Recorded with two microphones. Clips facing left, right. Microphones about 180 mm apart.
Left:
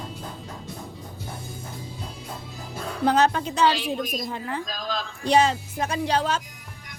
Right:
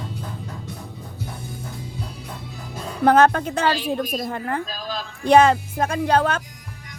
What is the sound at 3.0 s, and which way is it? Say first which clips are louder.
A woman's voice: right 5 dB; 55° right (ahead or behind).